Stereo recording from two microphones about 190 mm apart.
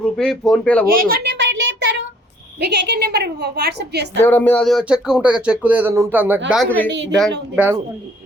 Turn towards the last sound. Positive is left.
turn(degrees=-10)  # may be behind; listen again after turning